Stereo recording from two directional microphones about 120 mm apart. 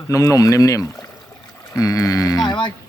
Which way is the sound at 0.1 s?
30° left (ahead or behind).